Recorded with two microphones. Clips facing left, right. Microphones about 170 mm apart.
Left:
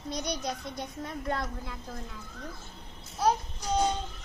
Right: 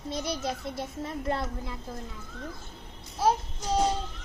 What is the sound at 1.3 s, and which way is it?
Speech, 30° right (ahead or behind).